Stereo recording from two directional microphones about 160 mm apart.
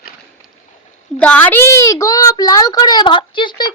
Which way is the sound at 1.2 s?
10° left (ahead or behind).